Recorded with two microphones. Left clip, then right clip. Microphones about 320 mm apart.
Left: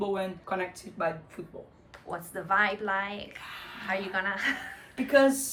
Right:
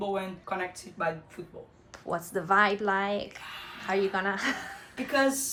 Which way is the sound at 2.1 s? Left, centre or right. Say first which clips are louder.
Right 3 dB; centre.